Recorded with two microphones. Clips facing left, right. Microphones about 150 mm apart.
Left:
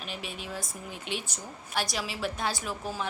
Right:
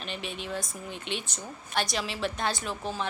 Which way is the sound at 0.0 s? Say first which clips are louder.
Right 2 dB; 5° left (ahead or behind).